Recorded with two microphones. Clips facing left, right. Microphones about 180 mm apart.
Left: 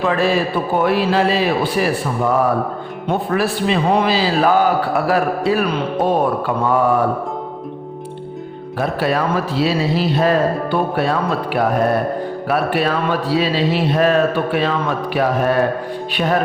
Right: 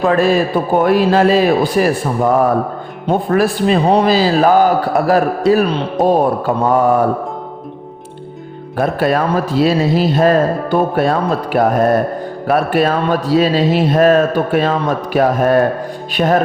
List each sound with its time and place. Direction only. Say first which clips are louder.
0.0 s a man's voice: right 4 dB; 45° right (ahead or behind)
8.8 s speech: right 4 dB; 50° right (ahead or behind)